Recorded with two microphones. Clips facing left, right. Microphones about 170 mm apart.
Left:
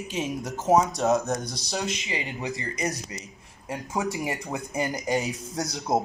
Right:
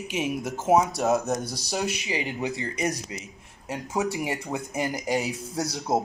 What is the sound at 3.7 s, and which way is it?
Speech, 5° right (ahead or behind).